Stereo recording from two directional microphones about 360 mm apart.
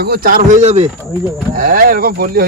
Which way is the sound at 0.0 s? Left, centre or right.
Right.